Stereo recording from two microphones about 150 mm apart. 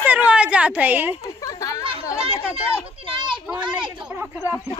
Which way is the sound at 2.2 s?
40° right (ahead or behind).